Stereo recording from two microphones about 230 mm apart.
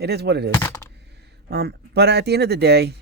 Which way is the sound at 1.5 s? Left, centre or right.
Right.